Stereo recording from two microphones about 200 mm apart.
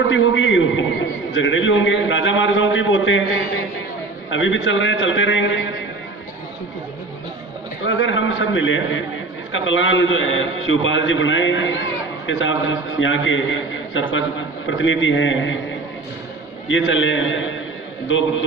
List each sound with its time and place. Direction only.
0.1 s a man's voice: 70° left (ahead or behind)
4.3 s a man's voice: 70° left (ahead or behind)
7.9 s a man's voice: 70° left (ahead or behind)
16.6 s a man's voice: 70° left (ahead or behind)